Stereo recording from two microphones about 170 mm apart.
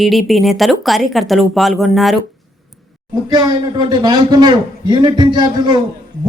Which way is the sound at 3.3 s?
25° right (ahead or behind).